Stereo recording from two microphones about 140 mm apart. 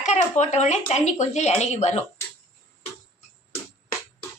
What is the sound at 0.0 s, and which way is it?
Speech, 55° left (ahead or behind).